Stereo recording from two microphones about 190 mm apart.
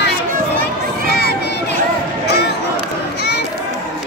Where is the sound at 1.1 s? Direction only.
60° left (ahead or behind).